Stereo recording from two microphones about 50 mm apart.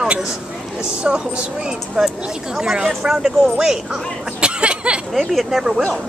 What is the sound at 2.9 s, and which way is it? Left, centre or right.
Speech, centre.